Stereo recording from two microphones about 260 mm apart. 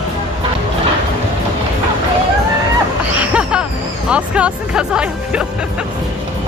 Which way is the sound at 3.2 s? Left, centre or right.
Centre.